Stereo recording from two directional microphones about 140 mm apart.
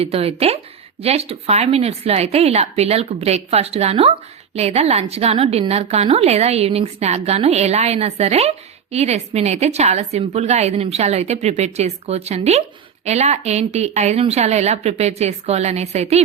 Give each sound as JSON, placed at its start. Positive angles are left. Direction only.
{"t": 0.0, "sound": "a woman's voice", "side_deg": -45}